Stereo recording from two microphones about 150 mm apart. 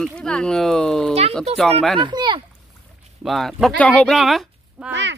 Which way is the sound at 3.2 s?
Centre (ahead or behind).